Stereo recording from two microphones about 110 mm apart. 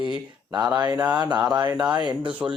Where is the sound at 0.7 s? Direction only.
35° right (ahead or behind).